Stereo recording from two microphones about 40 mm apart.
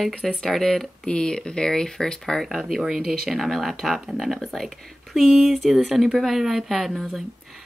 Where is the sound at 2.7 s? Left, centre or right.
Centre.